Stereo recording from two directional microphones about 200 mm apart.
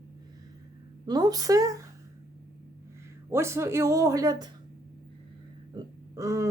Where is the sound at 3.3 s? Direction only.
15° right (ahead or behind).